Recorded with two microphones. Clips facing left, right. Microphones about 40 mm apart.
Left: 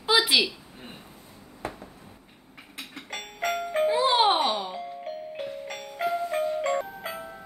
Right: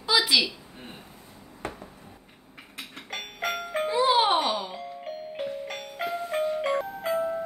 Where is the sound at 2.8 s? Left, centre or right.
Centre.